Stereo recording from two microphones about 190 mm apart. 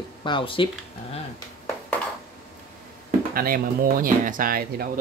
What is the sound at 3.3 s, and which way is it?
Speech, 50° right (ahead or behind).